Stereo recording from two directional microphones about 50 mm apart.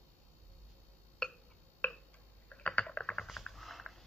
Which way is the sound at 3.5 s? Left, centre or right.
Centre.